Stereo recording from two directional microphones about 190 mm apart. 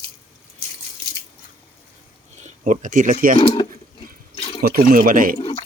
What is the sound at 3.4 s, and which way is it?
Speech, 25° left (ahead or behind).